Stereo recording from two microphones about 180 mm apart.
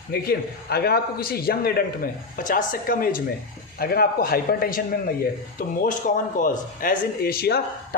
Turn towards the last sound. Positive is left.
turn(degrees=60)  # may be behind; listen again after turning